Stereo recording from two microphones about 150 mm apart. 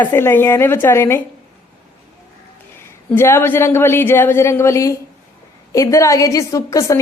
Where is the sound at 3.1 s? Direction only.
15° left (ahead or behind).